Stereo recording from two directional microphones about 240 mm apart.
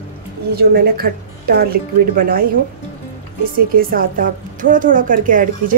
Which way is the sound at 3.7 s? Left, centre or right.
Right.